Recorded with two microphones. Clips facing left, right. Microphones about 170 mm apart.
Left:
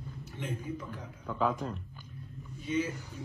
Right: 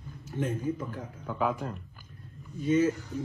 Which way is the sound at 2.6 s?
45° right (ahead or behind).